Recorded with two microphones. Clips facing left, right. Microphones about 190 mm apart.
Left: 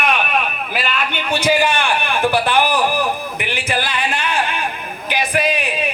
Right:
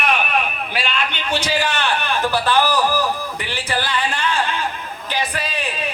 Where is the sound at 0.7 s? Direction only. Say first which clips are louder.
Left 2 dB; 10° left (ahead or behind).